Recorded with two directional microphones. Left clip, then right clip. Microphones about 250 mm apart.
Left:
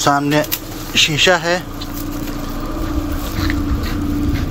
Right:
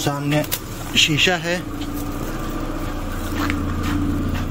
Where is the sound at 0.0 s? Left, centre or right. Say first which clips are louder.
Left 7 dB; centre.